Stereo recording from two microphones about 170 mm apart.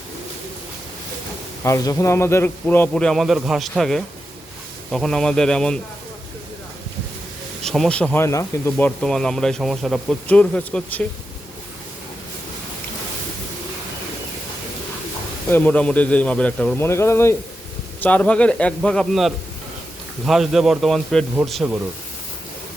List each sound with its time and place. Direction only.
1.6 s a man's voice: 20° left (ahead or behind)
7.6 s a man's voice: centre (ahead or behind)
9.0 s speech: 5° left (ahead or behind)
15.4 s a man's voice: 10° left (ahead or behind)